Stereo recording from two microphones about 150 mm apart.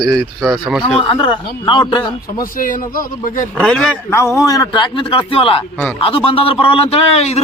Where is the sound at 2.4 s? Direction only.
65° left (ahead or behind).